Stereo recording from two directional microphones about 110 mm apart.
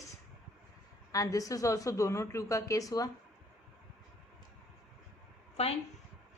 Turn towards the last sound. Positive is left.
turn(degrees=70)  # may be behind; listen again after turning